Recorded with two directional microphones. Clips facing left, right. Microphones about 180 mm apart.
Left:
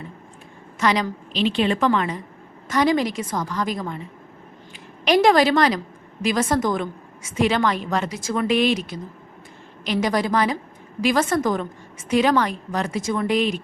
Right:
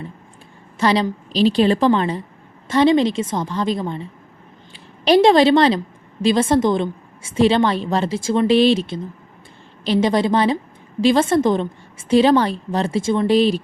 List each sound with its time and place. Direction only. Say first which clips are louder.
0.8 s a woman's voice: right 4 dB; 30° right (ahead or behind)